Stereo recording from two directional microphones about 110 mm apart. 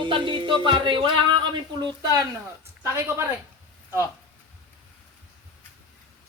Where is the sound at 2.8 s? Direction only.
25° right (ahead or behind).